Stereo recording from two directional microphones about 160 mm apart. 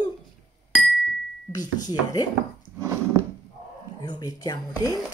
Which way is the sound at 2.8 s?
20° right (ahead or behind).